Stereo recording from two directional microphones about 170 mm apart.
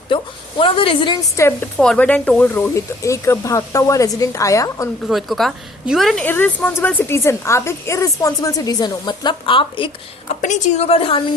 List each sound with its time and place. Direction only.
0.6 s a woman's voice: 30° left (ahead or behind)
1.8 s speech: 5° left (ahead or behind)
5.0 s a woman's voice: centre (ahead or behind); by 9.9 s 30° left (ahead or behind)
10.4 s a woman's voice: 40° left (ahead or behind)